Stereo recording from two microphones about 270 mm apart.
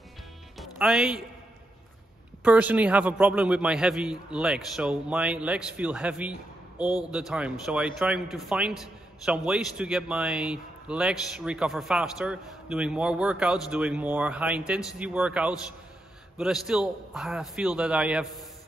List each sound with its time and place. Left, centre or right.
0.6 s speech: centre
2.4 s a man's voice: centre